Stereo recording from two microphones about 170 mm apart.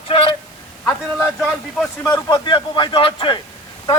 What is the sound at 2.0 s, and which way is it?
Speech, 20° left (ahead or behind).